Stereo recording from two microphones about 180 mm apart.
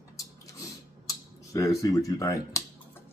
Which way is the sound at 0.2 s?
20° left (ahead or behind).